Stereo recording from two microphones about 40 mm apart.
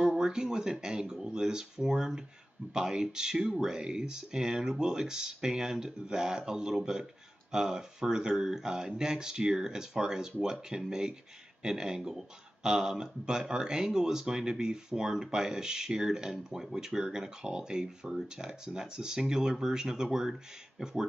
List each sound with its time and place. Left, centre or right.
0.0 s speech: centre